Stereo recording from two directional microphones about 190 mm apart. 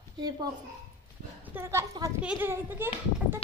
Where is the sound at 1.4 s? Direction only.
10° right (ahead or behind).